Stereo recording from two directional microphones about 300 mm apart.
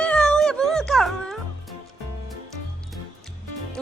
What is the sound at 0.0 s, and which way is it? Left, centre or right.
Music, centre.